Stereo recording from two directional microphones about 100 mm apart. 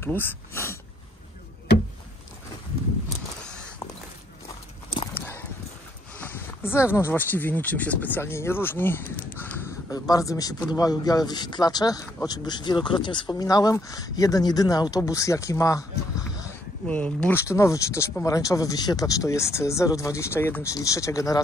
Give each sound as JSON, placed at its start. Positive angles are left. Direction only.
{"t": 0.0, "sound": "speech", "side_deg": 20}
{"t": 3.4, "sound": "a sound", "side_deg": 10}
{"t": 5.1, "sound": "dog", "side_deg": 15}
{"t": 6.1, "sound": "speech", "side_deg": 20}
{"t": 9.8, "sound": "speech", "side_deg": 35}
{"t": 16.8, "sound": "speech", "side_deg": 10}
{"t": 17.4, "sound": "speech", "side_deg": 30}
{"t": 20.7, "sound": "speech", "side_deg": 35}